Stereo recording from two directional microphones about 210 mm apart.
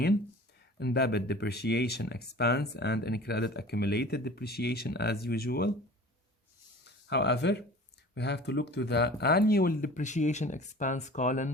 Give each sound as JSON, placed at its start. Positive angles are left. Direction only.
{"t": 0.8, "sound": "speech", "side_deg": 50}
{"t": 6.8, "sound": "speech", "side_deg": 55}